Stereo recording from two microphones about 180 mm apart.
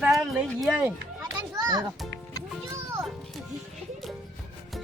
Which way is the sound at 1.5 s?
20° right (ahead or behind).